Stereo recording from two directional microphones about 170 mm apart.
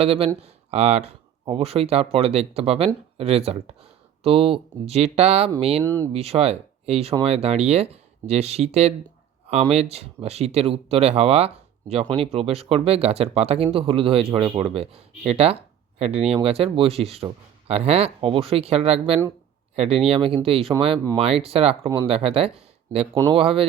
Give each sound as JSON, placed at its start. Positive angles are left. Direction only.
{"t": 0.0, "sound": "speech", "side_deg": -35}
{"t": 5.8, "sound": "speech", "side_deg": 10}
{"t": 6.1, "sound": "speech", "side_deg": -35}